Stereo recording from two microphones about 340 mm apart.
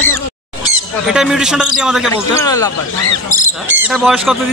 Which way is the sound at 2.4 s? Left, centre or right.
Centre.